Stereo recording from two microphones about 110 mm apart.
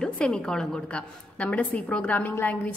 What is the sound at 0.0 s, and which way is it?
A woman's voice, 10° left (ahead or behind).